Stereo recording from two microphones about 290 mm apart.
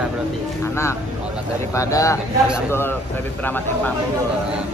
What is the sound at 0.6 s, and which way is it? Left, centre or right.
Speech, centre.